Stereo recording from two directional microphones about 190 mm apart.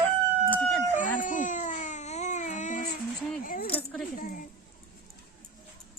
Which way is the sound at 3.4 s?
45° left (ahead or behind).